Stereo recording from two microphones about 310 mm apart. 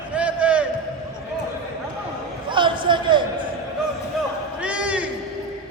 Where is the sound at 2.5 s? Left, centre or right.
Centre.